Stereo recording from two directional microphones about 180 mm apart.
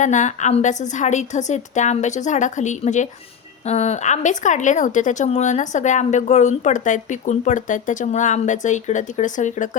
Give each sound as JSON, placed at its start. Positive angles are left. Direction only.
{"t": 0.0, "sound": "a woman's voice", "side_deg": 40}